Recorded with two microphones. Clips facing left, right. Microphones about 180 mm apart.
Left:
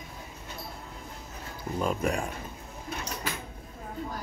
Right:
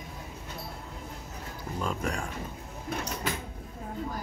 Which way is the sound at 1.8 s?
15° left (ahead or behind).